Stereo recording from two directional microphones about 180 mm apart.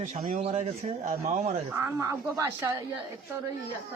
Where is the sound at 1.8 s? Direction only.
15° right (ahead or behind).